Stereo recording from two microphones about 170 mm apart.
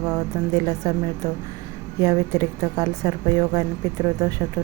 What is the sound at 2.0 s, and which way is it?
Speech, 20° right (ahead or behind).